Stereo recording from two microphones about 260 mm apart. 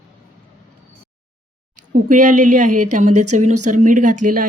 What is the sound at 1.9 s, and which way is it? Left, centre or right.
Speech, right.